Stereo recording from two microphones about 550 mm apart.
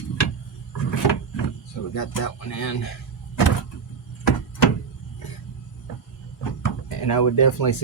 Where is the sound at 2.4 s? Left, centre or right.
Left.